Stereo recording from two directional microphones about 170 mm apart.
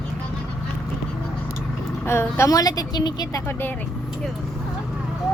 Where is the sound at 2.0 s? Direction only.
15° left (ahead or behind).